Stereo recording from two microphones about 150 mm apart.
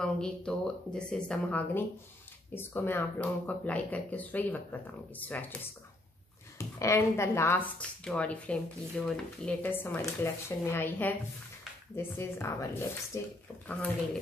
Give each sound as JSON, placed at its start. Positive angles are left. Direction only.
{"t": 0.0, "sound": "speech", "side_deg": 5}